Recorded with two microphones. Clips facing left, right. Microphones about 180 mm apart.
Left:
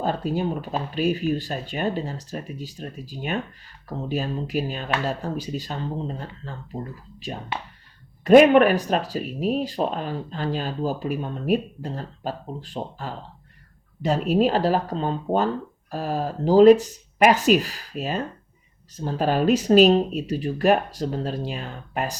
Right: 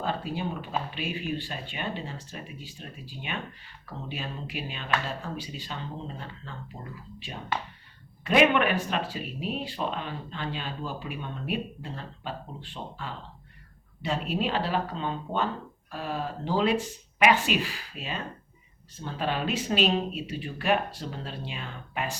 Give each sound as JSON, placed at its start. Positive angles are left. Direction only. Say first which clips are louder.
{"t": 0.0, "sound": "speech", "louder": "left 6 dB", "side_deg": 40}